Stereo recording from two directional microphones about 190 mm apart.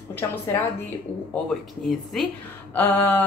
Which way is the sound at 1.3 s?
Centre (ahead or behind).